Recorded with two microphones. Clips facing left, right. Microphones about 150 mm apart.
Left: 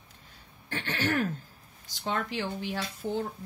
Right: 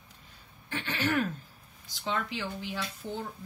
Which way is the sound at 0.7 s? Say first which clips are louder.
Even; 50° left (ahead or behind).